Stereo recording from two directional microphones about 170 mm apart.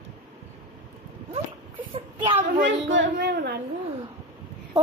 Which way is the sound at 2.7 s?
90° right.